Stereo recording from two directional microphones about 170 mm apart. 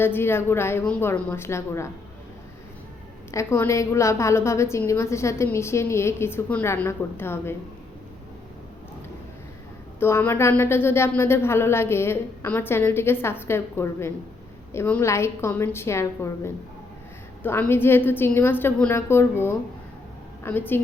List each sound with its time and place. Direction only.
0.0 s a woman's voice: 15° left (ahead or behind)
3.3 s a woman's voice: 15° left (ahead or behind)
10.0 s a woman's voice: 15° left (ahead or behind)